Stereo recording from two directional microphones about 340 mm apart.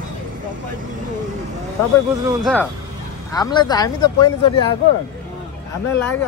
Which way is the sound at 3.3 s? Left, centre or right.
Centre.